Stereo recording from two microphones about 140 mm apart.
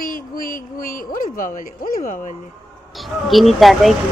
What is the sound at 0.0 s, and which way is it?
Speech, 85° left.